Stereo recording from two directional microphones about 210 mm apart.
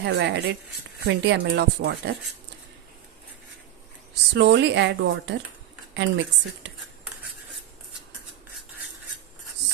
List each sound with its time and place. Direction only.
0.0 s a woman's voice: 55° right (ahead or behind)
4.1 s a woman's voice: 55° right (ahead or behind)